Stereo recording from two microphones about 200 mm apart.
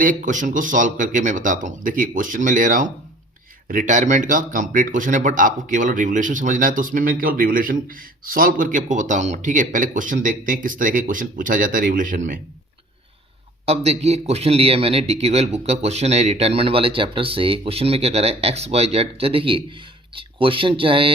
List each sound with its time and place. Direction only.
0.0 s a man's voice: 40° right (ahead or behind)
13.7 s speech: 30° right (ahead or behind)